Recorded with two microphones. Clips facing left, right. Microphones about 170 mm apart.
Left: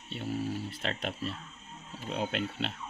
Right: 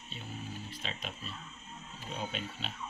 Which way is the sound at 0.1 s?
70° left (ahead or behind).